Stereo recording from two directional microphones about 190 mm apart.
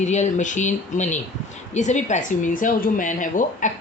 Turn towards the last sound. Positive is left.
turn(degrees=45)  # may be behind; listen again after turning